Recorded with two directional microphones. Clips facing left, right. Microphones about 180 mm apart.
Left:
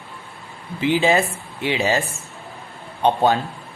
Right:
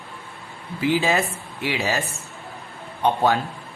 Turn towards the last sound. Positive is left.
turn(degrees=25)  # may be behind; listen again after turning